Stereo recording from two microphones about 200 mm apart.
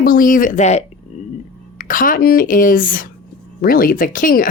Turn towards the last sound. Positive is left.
turn(degrees=45)  # may be behind; listen again after turning